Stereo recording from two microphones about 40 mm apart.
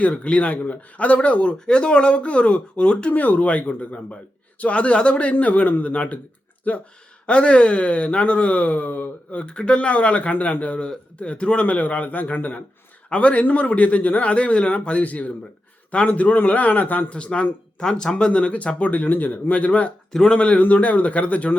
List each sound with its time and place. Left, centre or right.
0.0 s speech: left
3.1 s speech: left
5.3 s speech: left
9.4 s speech: left
11.6 s speech: left
13.1 s a man's voice: left
17.1 s speech: left
17.8 s speech: centre
18.3 s speech: left
20.6 s speech: left